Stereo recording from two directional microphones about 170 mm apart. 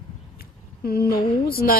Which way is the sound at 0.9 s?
60° left (ahead or behind).